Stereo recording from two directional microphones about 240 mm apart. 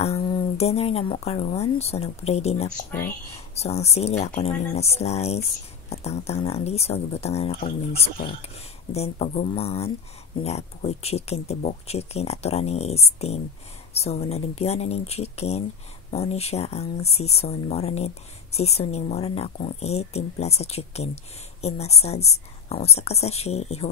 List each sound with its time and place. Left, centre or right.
0.0 s speech: left
8.9 s speech: left